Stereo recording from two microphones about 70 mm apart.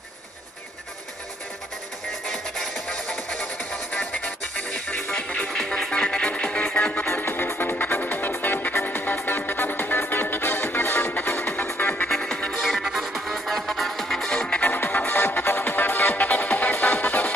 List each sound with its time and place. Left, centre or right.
2.2 s music: centre
7.1 s music: left
11.6 s music: left
12.1 s music: centre
14.7 s music: left